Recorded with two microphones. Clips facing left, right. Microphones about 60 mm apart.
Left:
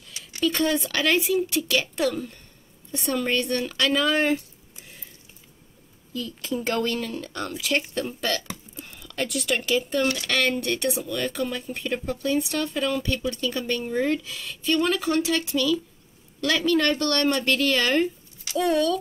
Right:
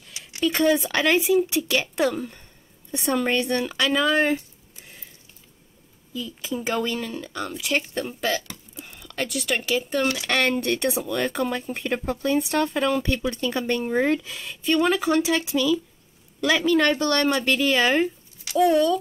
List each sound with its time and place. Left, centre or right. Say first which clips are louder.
0.1 s speech: right 1 dB; centre
6.1 s speech: left 1 dB; centre
11.1 s speech: right 3 dB; right